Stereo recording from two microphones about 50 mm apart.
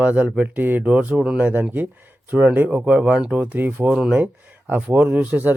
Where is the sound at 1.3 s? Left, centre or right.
Right; by 3.3 s centre.